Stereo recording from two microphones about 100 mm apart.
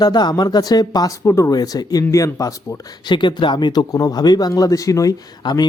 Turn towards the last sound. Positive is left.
turn(degrees=45)  # may be behind; listen again after turning